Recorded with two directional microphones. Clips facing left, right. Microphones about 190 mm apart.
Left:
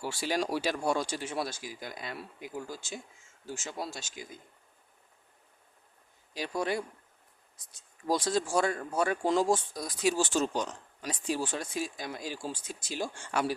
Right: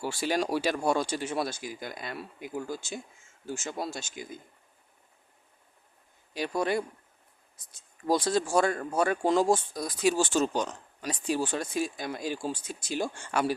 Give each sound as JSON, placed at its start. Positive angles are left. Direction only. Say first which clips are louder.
{"t": 0.0, "sound": "speech", "louder": "right 3 dB", "side_deg": -50}
{"t": 6.3, "sound": "speech", "louder": "right 3 dB", "side_deg": -60}
{"t": 8.0, "sound": "speech", "louder": "right 3 dB", "side_deg": -55}